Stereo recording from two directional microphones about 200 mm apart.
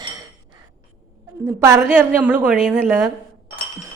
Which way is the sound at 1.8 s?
10° right (ahead or behind).